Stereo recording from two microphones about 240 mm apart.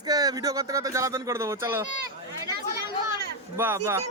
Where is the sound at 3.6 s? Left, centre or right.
Centre.